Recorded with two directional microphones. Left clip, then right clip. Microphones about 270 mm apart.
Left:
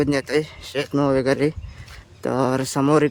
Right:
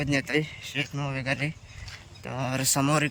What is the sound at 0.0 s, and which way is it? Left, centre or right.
Speech, centre.